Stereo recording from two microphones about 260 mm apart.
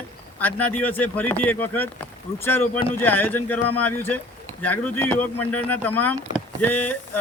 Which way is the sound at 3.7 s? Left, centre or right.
Left.